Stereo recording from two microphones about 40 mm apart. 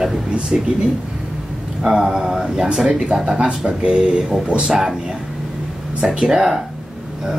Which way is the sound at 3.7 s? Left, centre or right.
Right.